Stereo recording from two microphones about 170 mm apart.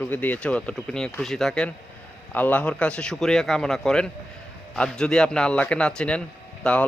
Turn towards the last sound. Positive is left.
turn(degrees=5)  # may be behind; listen again after turning